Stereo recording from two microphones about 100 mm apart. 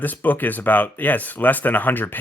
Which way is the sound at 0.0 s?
15° left (ahead or behind).